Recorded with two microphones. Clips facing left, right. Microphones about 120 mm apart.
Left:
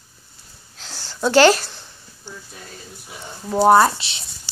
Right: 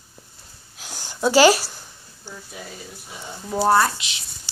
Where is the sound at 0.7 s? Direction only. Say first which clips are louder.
Even; 15° right (ahead or behind).